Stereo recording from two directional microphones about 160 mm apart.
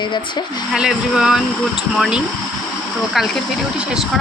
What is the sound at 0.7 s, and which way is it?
Speech, 5° right (ahead or behind).